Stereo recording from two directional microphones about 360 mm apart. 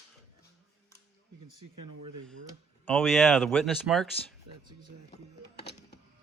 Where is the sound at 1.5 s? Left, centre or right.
Right.